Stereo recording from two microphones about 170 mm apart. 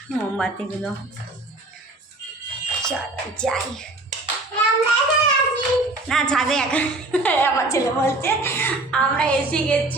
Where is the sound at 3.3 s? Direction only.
5° left (ahead or behind).